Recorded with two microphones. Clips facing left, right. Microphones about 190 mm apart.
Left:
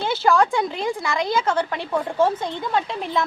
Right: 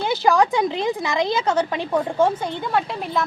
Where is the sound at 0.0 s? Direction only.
15° right (ahead or behind).